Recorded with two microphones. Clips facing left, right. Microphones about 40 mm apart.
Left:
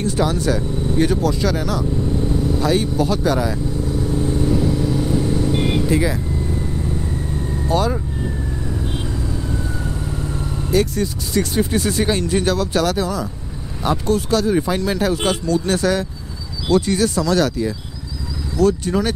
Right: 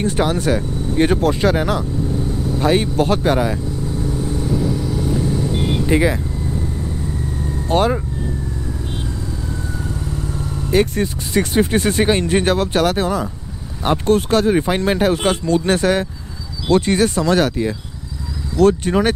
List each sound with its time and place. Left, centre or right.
0.0 s speech: right
4.2 s vehicle: centre
5.9 s speech: right
7.6 s speech: right
10.0 s vehicle: centre
10.7 s speech: right